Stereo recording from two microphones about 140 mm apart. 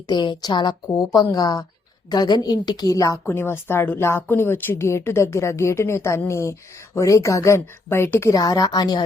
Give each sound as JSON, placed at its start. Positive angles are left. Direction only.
{"t": 0.1, "sound": "a woman's voice", "side_deg": 30}